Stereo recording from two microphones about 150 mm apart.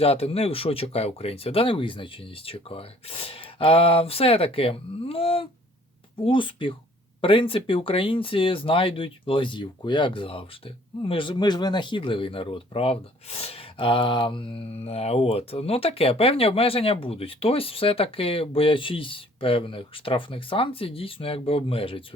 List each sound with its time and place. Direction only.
0.0 s speech: 40° left (ahead or behind)